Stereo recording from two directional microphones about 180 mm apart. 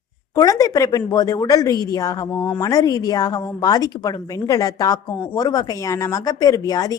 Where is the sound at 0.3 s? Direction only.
20° left (ahead or behind).